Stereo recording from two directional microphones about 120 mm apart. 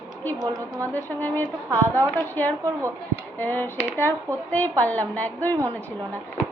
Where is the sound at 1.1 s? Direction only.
15° left (ahead or behind).